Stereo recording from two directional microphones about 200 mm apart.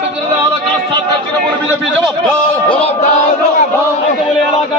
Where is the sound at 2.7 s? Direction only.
30° left (ahead or behind).